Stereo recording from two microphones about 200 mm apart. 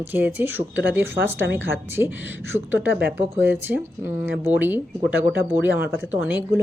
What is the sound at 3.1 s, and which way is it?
A woman's voice, 10° right (ahead or behind).